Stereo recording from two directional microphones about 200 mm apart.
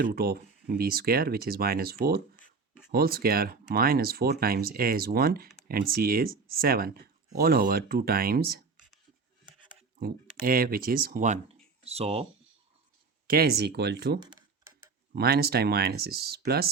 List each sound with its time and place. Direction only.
0.0 s speech: 50° right (ahead or behind)
10.4 s speech: 45° right (ahead or behind); by 12.3 s 30° right (ahead or behind)
13.2 s speech: 50° right (ahead or behind)
15.1 s speech: 50° right (ahead or behind)